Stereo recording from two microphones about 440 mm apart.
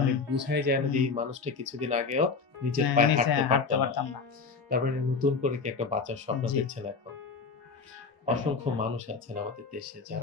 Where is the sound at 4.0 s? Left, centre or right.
Left.